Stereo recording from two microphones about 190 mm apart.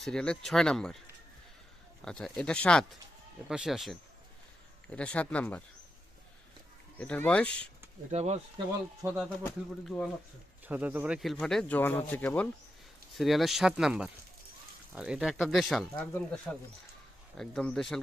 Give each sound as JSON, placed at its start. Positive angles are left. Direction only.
{"t": 0.0, "sound": "speech", "side_deg": 5}
{"t": 2.0, "sound": "speech", "side_deg": 5}
{"t": 7.0, "sound": "speech", "side_deg": 5}
{"t": 8.1, "sound": "speech", "side_deg": -35}
{"t": 9.0, "sound": "speech", "side_deg": -10}
{"t": 9.4, "sound": "speech", "side_deg": 5}
{"t": 10.7, "sound": "speech", "side_deg": -10}